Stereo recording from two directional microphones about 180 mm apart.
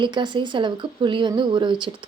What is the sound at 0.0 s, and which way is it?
A woman's voice, 25° right (ahead or behind).